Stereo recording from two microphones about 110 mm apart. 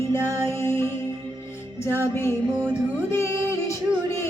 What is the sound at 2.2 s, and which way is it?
Music, 20° left (ahead or behind).